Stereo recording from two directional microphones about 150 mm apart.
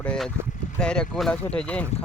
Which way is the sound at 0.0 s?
5° left (ahead or behind).